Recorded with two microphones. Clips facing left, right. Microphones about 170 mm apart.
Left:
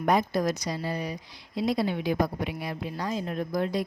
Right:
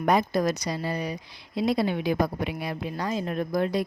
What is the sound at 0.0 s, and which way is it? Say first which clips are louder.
A woman's voice: right 2 dB; 80° right.